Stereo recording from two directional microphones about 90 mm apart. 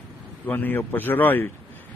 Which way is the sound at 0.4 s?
20° left (ahead or behind).